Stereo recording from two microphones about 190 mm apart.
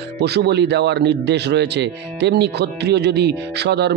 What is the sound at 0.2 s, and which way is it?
A man's voice, 60° right (ahead or behind).